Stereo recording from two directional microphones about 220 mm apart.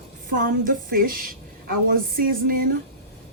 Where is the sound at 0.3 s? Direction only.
40° right (ahead or behind).